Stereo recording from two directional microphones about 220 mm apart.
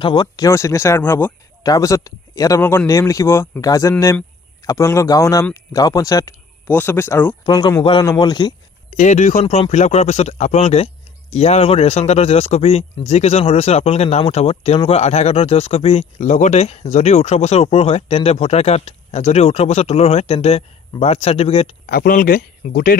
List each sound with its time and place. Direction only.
0.0 s speech: 20° left (ahead or behind)
8.9 s speech: 35° left (ahead or behind)
21.8 s speech: 40° left (ahead or behind)